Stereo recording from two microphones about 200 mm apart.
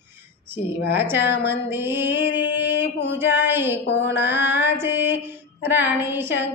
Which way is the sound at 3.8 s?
60° left (ahead or behind).